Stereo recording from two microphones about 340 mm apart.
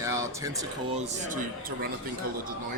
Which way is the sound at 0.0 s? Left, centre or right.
Centre.